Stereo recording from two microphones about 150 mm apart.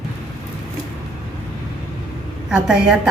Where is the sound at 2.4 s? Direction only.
5° right (ahead or behind).